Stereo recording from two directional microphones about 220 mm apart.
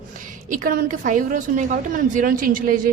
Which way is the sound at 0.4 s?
35° right (ahead or behind).